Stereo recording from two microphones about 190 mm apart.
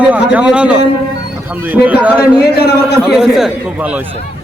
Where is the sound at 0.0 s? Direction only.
5° right (ahead or behind).